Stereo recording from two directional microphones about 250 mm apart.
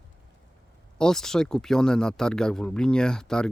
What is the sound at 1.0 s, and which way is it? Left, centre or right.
Speech, centre.